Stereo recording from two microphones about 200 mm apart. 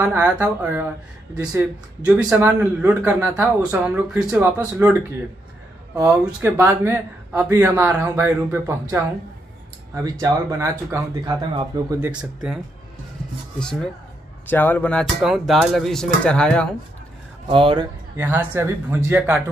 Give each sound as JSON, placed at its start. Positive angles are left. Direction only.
{"t": 0.0, "sound": "speech", "side_deg": -10}
{"t": 2.0, "sound": "speech", "side_deg": -5}
{"t": 5.9, "sound": "speech", "side_deg": -15}
{"t": 12.1, "sound": "speech", "side_deg": -5}
{"t": 13.6, "sound": "speech", "side_deg": 5}
{"t": 17.5, "sound": "speech", "side_deg": -25}
{"t": 18.1, "sound": "speech", "side_deg": -10}